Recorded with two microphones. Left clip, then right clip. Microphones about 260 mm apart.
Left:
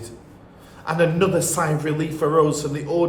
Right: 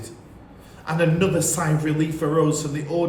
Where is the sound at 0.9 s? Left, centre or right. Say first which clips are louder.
Left 2 dB; centre.